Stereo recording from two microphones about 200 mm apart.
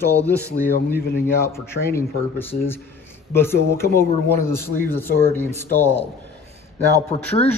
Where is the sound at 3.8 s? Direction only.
50° left (ahead or behind).